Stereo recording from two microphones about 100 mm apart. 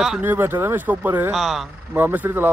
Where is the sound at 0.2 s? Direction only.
20° right (ahead or behind).